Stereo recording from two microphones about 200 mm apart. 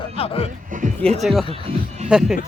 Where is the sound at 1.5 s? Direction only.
35° right (ahead or behind).